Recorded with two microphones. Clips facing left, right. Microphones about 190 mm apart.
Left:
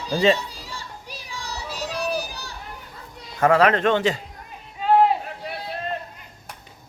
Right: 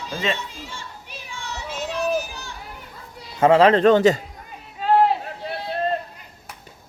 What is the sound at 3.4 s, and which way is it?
Speech, 25° right (ahead or behind).